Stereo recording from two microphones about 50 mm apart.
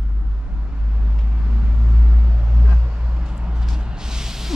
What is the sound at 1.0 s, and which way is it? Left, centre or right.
Vehicle, centre.